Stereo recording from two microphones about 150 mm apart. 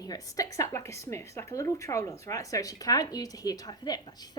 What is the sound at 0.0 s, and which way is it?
Speech, 25° left (ahead or behind).